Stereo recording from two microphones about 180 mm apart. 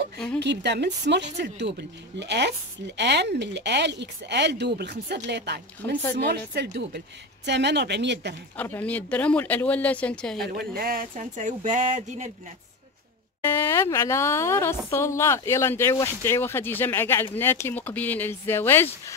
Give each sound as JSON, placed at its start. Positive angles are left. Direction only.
{"t": 0.4, "sound": "speech", "side_deg": -70}
{"t": 8.5, "sound": "speech", "side_deg": 10}
{"t": 10.5, "sound": "speech", "side_deg": -55}
{"t": 13.4, "sound": "speech", "side_deg": 15}